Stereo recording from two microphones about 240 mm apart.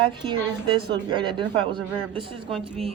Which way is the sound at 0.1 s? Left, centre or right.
Centre.